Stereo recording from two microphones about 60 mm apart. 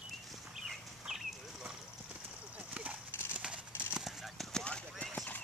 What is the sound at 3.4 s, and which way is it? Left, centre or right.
Clip-clop, centre.